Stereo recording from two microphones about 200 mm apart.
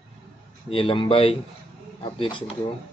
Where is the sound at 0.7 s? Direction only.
25° left (ahead or behind).